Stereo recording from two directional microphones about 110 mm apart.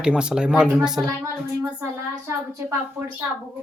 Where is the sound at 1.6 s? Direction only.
25° right (ahead or behind).